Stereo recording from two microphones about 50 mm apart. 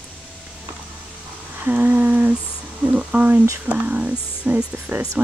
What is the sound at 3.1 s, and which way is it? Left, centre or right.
Speech, right.